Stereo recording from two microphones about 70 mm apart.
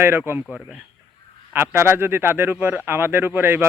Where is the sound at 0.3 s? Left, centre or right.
Right.